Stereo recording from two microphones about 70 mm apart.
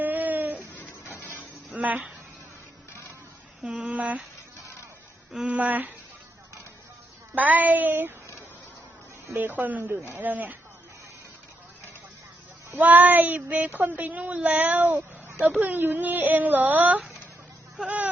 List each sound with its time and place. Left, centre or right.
0.0 s a sound: right
0.8 s a sound: left
1.7 s speech: right
3.6 s speech: centre
5.5 s speech: right
7.3 s speech: right
9.3 s speech: right
12.8 s speech: right